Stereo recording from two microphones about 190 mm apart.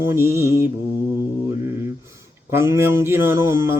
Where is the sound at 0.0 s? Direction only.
10° right (ahead or behind).